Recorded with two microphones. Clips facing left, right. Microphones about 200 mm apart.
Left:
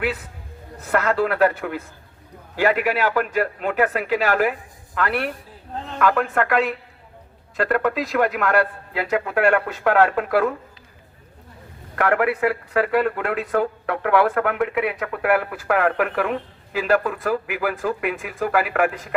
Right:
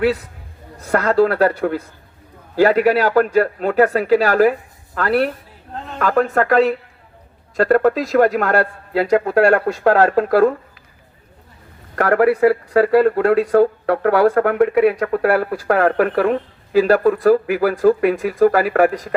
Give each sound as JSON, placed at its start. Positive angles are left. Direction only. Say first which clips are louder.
{"t": 0.9, "sound": "speech", "louder": "right 5 dB", "side_deg": -35}
{"t": 11.9, "sound": "speech", "louder": "right 6 dB", "side_deg": -35}